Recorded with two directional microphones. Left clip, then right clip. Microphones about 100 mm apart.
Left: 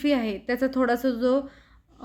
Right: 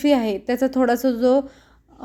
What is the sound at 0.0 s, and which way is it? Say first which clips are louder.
A woman's voice: right 6 dB; 25° right (ahead or behind).